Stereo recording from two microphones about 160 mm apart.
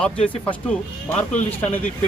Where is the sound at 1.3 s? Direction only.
50° left (ahead or behind).